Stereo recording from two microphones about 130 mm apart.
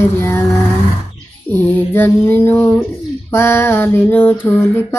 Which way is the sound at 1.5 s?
15° left (ahead or behind).